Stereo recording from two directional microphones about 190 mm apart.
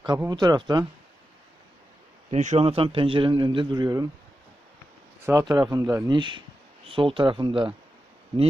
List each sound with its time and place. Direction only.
0.0 s a man's voice: 20° right (ahead or behind)
2.3 s a man's voice: 35° right (ahead or behind); by 4.1 s 20° right (ahead or behind)
5.2 s a man's voice: 15° right (ahead or behind)